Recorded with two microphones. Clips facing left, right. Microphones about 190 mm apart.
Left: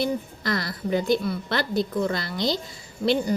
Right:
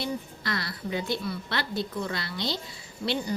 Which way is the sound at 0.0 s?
45° left (ahead or behind).